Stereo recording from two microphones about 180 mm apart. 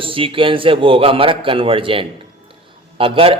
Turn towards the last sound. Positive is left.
turn(degrees=-30)  # may be behind; listen again after turning